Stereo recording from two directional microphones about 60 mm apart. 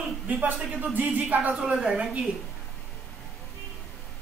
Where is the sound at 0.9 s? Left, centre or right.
Right.